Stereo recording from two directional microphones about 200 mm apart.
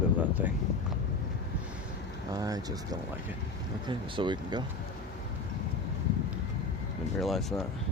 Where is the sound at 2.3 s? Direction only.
20° right (ahead or behind).